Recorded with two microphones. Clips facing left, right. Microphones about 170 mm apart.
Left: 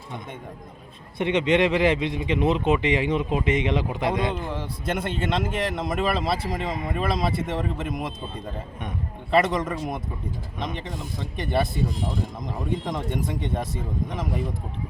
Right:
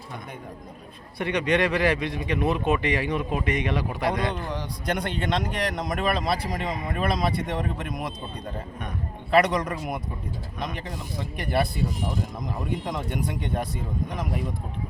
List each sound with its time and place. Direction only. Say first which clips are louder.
1.2 s speech: left 3 dB; 20° left (ahead or behind)
4.3 s speech: left 1 dB; 5° left (ahead or behind)
9.3 s speech: even; centre (ahead or behind)
11.5 s speech: even; centre (ahead or behind)
12.8 s speech: left 1 dB; centre (ahead or behind)